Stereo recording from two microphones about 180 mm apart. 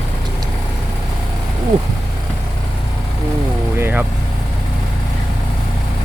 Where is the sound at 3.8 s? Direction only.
10° right (ahead or behind).